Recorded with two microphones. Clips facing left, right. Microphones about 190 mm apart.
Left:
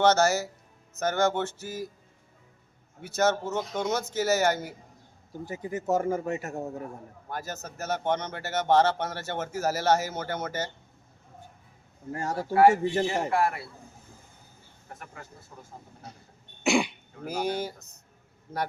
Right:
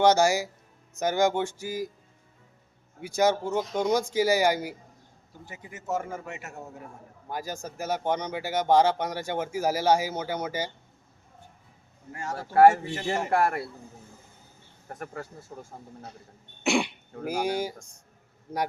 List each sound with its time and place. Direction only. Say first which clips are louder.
0.0 s speech: right 1 dB; 15° right (ahead or behind)
3.0 s speech: right 2 dB; 10° right (ahead or behind)
5.5 s a man's voice: left 5 dB; 35° left (ahead or behind)
7.3 s speech: right 2 dB; 10° right (ahead or behind)
12.1 s a man's voice: left 5 dB; 40° left (ahead or behind)
13.1 s a man's voice: right 1 dB; 50° right (ahead or behind)
14.9 s a man's voice: right 8 dB; 45° right (ahead or behind)
16.6 s speech: left 1 dB; centre (ahead or behind)